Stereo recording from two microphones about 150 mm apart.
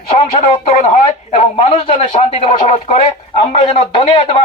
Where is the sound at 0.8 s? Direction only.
50° left (ahead or behind).